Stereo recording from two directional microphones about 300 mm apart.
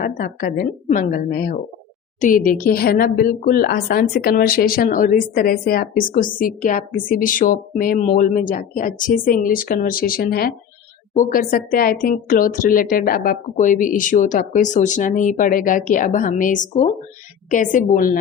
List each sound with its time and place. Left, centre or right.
0.0 s speech: left